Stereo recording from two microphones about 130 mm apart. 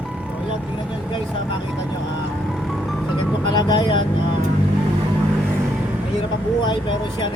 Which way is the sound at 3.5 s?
35° left (ahead or behind).